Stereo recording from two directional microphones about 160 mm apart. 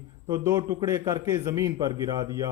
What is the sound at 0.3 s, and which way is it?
A man's voice, 20° right (ahead or behind).